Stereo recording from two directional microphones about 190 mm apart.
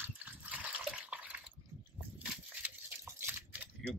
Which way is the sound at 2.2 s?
10° right (ahead or behind).